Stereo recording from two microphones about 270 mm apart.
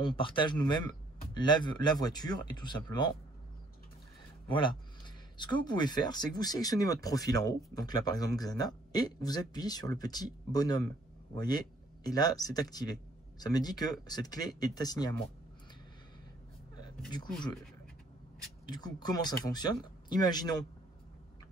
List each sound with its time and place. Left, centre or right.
0.0 s speech: centre
4.5 s speech: centre
18.7 s speech: centre